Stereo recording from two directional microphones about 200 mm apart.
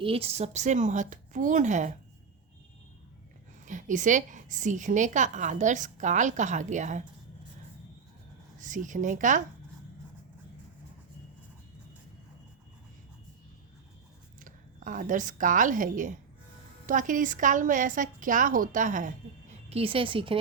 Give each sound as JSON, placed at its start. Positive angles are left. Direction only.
{"t": 0.0, "sound": "a woman's voice", "side_deg": -30}
{"t": 3.7, "sound": "a woman's voice", "side_deg": -40}
{"t": 8.5, "sound": "a woman's voice", "side_deg": -40}
{"t": 14.4, "sound": "a woman's voice", "side_deg": -40}